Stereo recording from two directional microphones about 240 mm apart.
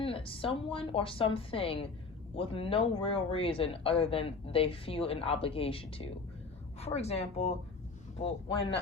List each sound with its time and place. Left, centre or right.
0.0 s speech: left